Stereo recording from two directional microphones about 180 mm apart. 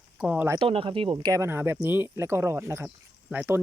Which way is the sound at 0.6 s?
30° right (ahead or behind).